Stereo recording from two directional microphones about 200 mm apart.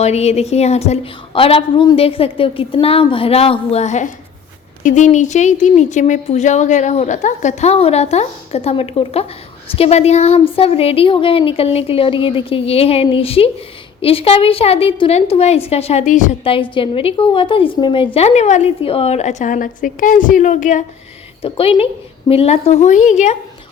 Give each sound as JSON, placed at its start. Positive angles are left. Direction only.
{"t": 0.0, "sound": "a woman's voice", "side_deg": 30}